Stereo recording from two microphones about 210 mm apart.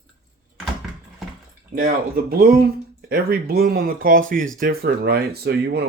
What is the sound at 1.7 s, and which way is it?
Speech, 45° right (ahead or behind).